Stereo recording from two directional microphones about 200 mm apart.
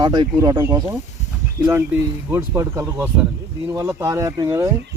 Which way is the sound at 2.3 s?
15° right (ahead or behind).